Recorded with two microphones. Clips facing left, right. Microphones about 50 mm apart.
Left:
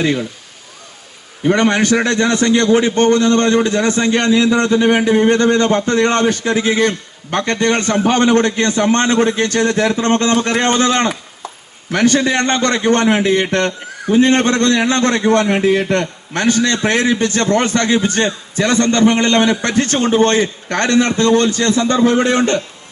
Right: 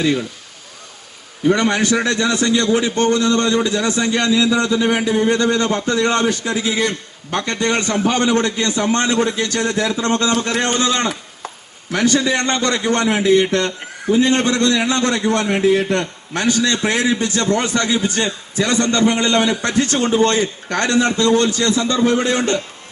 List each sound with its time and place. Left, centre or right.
1.5 s a man's voice: left